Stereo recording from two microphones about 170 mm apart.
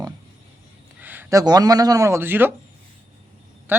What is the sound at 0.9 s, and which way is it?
Speech, 10° right (ahead or behind).